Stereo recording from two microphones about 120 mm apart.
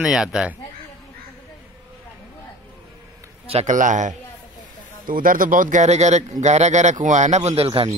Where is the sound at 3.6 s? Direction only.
90° right.